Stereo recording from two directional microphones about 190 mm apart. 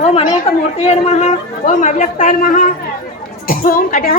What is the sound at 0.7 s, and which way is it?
A man's voice, 35° left (ahead or behind).